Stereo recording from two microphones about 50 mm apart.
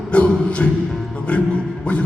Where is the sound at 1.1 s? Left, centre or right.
Left.